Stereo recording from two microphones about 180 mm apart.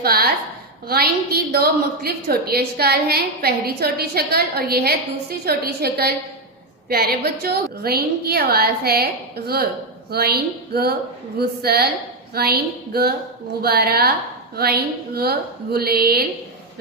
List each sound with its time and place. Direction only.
0.0 s a woman's voice: 60° right (ahead or behind)
10.1 s a woman's voice: 60° right (ahead or behind)